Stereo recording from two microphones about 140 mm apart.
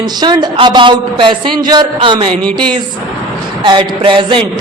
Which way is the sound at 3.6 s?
35° right (ahead or behind).